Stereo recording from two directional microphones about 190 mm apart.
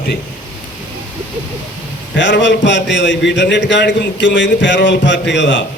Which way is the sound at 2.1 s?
70° left (ahead or behind).